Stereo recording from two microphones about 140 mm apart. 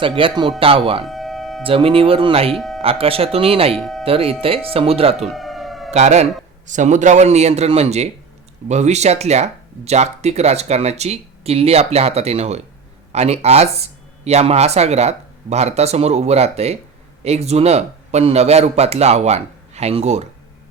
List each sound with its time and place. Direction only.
0.2 s speech: 40° right (ahead or behind)
1.0 s a sound: centre (ahead or behind)
1.6 s speech: 40° right (ahead or behind)
2.5 s a sound: centre (ahead or behind)
2.8 s speech: 40° right (ahead or behind)
3.8 s speech: centre (ahead or behind)
4.0 s speech: 45° right (ahead or behind)
5.3 s siren: centre (ahead or behind)
5.9 s speech: 55° right (ahead or behind)